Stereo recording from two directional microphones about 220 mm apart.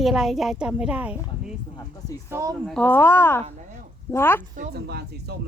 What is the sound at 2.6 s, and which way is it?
A woman's voice, 5° left (ahead or behind).